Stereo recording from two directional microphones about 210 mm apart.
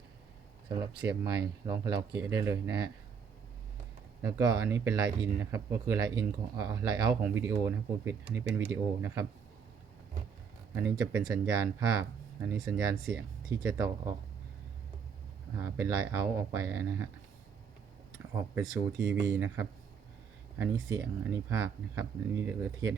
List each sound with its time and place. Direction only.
0.7 s speech: 15° right (ahead or behind)
4.2 s speech: 15° right (ahead or behind)
10.8 s speech: 15° right (ahead or behind)
12.6 s speech: 5° right (ahead or behind)
13.7 s speech: 15° right (ahead or behind)
15.5 s speech: 15° right (ahead or behind)
18.5 s speech: 15° right (ahead or behind)